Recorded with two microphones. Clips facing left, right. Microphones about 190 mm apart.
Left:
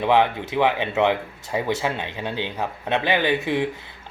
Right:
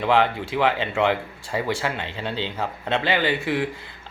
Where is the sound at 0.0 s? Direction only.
20° left (ahead or behind).